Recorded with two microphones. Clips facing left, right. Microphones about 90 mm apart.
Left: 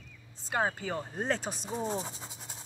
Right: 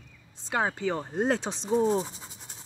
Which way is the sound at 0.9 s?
25° right (ahead or behind).